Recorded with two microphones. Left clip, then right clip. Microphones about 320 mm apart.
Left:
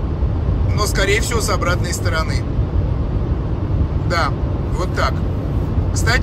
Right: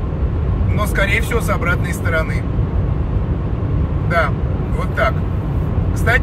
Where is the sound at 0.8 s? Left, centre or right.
Centre.